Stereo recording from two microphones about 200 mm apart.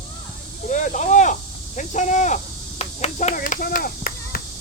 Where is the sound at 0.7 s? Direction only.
40° left (ahead or behind).